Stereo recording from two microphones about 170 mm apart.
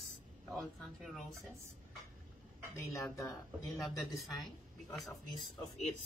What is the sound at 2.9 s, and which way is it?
Speech, 20° left (ahead or behind).